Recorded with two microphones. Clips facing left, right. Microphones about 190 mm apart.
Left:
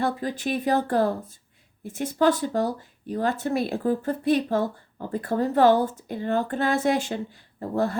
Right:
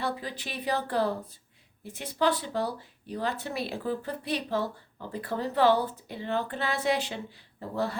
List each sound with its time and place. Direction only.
0.0 s speech: 45° left (ahead or behind)